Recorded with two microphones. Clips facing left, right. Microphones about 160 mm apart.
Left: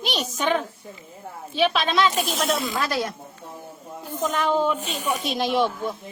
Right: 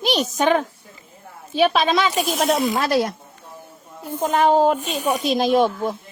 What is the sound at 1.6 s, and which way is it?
Speech, 45° right (ahead or behind).